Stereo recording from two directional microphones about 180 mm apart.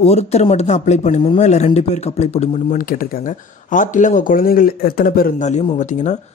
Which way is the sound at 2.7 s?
50° left (ahead or behind).